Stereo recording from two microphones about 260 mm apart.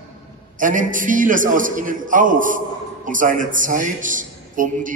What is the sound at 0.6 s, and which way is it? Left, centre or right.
A man's voice, right.